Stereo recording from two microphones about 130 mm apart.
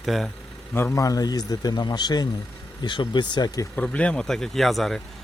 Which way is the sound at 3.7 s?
10° left (ahead or behind).